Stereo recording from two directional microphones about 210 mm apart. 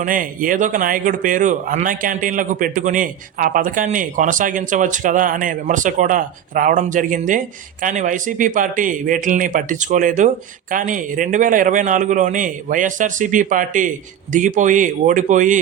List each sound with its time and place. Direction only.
0.0 s a man's voice: 40° right (ahead or behind)